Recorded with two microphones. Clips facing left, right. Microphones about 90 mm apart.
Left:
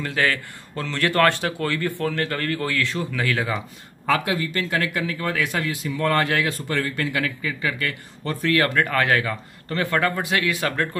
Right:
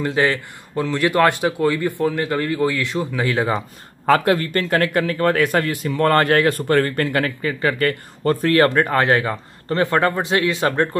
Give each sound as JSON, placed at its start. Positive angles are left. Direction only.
{"t": 0.0, "sound": "speech", "side_deg": -20}
{"t": 4.1, "sound": "speech", "side_deg": -50}